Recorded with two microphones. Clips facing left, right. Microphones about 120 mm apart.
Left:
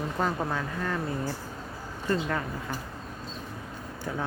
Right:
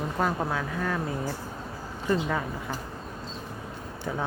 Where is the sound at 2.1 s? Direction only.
5° right (ahead or behind).